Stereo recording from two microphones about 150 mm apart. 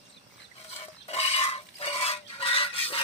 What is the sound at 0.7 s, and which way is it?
Stir, 45° left (ahead or behind).